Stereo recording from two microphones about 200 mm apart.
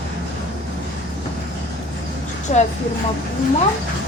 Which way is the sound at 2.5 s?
40° left (ahead or behind).